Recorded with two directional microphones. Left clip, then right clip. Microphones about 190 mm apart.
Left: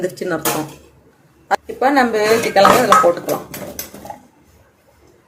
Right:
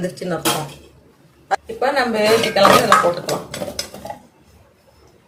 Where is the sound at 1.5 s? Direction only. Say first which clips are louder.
Left 3 dB; 45° left (ahead or behind).